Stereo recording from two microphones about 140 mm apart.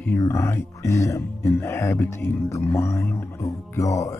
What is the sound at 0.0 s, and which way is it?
Speech, 20° left (ahead or behind).